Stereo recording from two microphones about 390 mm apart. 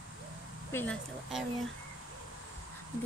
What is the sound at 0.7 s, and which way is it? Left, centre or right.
Speech, centre.